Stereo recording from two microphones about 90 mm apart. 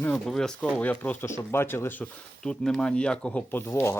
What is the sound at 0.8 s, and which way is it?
Speech, 15° left (ahead or behind).